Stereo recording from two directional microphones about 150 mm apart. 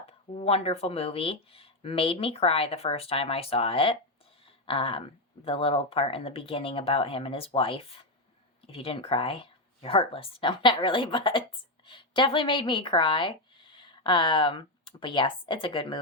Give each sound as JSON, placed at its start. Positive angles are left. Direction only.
{"t": 0.0, "sound": "speech", "side_deg": 40}
{"t": 4.4, "sound": "a sound", "side_deg": 40}
{"t": 5.5, "sound": "speech", "side_deg": 40}